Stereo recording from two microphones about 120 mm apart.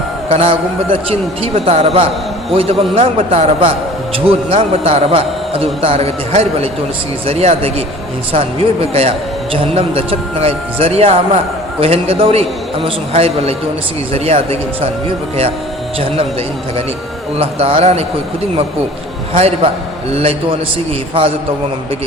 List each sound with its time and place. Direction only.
0.3 s a man's voice: 55° right (ahead or behind)
3.2 s speech: 65° right (ahead or behind)
17.3 s speech: 55° right (ahead or behind)
19.3 s speech: 55° right (ahead or behind)